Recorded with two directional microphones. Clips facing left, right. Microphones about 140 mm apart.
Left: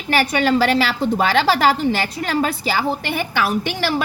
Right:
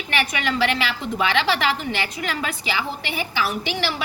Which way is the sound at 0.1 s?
40° left (ahead or behind).